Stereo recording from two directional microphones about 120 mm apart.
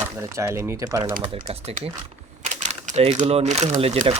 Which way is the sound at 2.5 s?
90° right.